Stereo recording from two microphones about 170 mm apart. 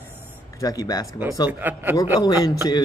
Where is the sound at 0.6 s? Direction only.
20° left (ahead or behind).